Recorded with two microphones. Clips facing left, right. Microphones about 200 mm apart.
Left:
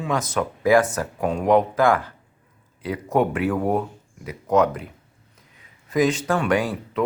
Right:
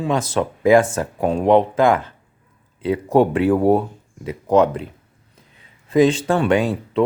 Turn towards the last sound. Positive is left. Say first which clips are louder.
# right 5 dB
turn(degrees=-25)  # may be behind; listen again after turning